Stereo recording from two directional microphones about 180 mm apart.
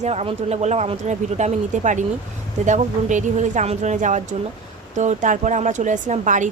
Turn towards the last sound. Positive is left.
turn(degrees=-45)  # may be behind; listen again after turning